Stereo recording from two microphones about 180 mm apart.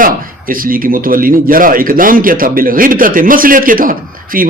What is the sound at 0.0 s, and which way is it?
Speech, 50° right (ahead or behind).